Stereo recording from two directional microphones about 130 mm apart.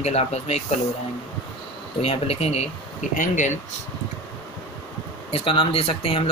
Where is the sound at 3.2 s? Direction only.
70° left (ahead or behind).